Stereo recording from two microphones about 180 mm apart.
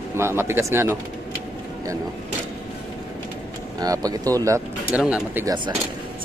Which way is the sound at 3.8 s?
20° right (ahead or behind).